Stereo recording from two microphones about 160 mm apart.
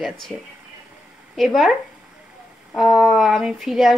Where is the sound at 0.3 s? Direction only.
5° left (ahead or behind).